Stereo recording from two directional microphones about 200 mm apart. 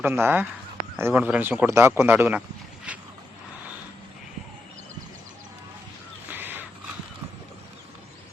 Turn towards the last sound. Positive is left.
turn(degrees=-10)  # may be behind; listen again after turning